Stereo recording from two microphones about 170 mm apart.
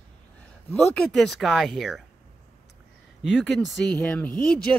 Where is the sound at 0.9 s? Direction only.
5° left (ahead or behind).